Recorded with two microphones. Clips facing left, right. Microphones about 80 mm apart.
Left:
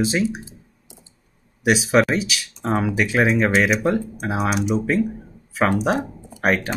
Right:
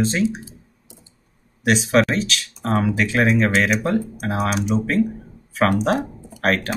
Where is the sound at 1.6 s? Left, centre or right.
Centre.